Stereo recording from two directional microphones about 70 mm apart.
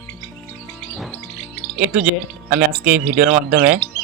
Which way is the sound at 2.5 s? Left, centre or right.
Centre.